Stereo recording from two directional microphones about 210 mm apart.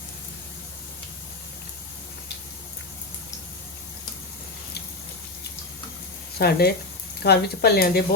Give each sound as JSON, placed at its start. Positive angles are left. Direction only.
{"t": 6.4, "sound": "speech", "side_deg": 50}